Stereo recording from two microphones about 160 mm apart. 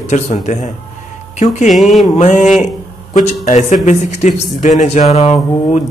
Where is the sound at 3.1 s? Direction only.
50° left (ahead or behind).